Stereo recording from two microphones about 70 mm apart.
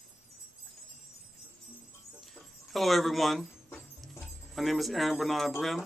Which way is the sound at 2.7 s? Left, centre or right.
Centre.